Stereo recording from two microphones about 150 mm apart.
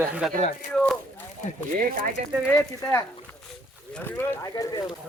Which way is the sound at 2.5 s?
15° left (ahead or behind).